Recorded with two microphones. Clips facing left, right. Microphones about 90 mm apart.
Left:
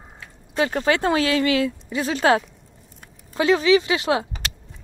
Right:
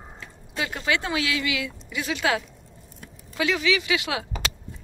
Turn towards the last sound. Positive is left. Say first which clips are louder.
# left 7 dB
turn(degrees=35)  # may be behind; listen again after turning